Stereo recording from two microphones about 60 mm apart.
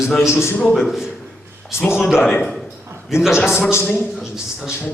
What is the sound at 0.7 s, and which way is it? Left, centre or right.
Speech, centre.